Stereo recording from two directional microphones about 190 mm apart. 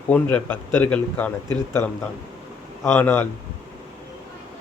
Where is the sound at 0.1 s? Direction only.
10° left (ahead or behind).